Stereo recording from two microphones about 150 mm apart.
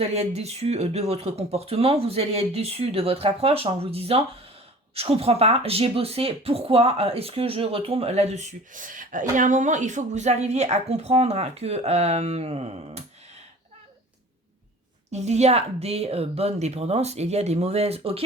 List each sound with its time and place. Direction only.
0.0 s speech: 45° right (ahead or behind)
15.1 s speech: 50° right (ahead or behind)